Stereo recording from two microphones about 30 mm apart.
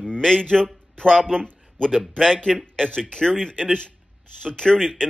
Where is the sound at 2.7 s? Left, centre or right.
Left.